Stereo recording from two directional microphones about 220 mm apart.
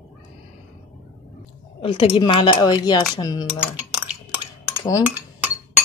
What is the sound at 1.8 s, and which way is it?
Speech, 25° left (ahead or behind).